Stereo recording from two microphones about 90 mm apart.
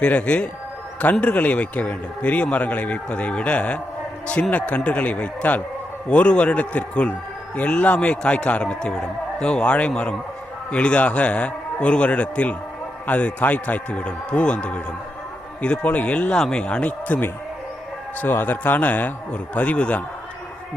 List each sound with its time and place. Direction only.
0.0 s a man's voice: 15° left (ahead or behind)